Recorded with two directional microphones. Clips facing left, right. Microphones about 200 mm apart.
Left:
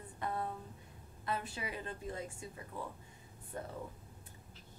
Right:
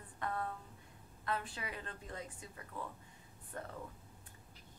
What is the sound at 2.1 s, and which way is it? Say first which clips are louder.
Speech: left 5 dB; 25° left (ahead or behind).